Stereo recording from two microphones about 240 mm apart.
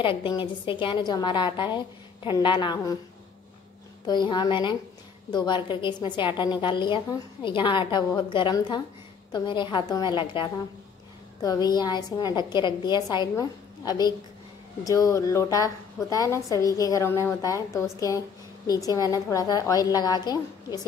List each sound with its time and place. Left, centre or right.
0.0 s a woman's voice: left
4.0 s a woman's voice: centre